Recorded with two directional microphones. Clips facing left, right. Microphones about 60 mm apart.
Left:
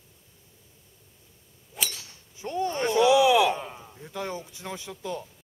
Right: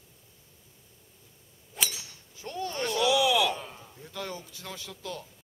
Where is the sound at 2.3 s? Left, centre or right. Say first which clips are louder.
Left 6 dB; left.